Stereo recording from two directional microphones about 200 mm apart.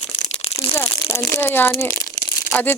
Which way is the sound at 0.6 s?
10° left (ahead or behind).